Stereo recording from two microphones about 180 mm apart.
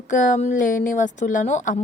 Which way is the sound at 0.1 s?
45° left (ahead or behind).